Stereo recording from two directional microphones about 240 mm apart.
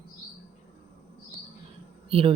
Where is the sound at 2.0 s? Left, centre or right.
Right.